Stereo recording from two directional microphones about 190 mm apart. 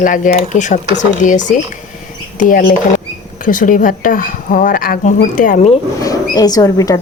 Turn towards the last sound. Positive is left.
turn(degrees=20)  # may be behind; listen again after turning